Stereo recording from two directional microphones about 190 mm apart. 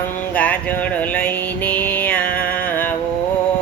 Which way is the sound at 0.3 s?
10° left (ahead or behind).